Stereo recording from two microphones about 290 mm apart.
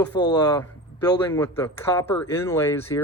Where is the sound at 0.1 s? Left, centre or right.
Left.